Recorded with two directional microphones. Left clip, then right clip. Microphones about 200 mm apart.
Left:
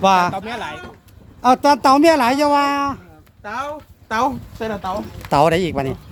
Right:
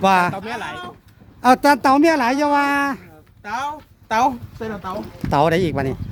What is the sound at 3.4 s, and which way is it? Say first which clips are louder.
Speech: right 1 dB; 50° right (ahead or behind).